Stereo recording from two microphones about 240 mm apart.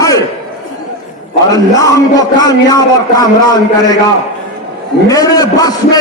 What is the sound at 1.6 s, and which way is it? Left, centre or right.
A man's voice, centre.